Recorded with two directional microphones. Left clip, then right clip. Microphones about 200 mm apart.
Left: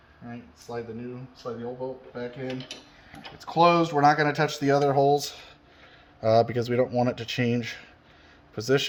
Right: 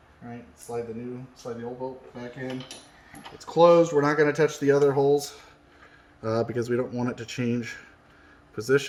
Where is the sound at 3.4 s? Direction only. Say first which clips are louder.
Right 3 dB; 30° left (ahead or behind).